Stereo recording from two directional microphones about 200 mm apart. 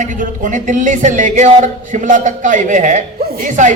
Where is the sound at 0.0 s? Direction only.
40° right (ahead or behind).